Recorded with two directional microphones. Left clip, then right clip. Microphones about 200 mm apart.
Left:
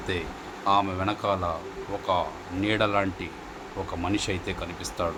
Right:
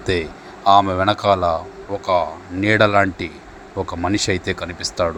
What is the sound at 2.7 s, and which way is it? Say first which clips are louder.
A man's voice: right 10 dB; 35° right (ahead or behind).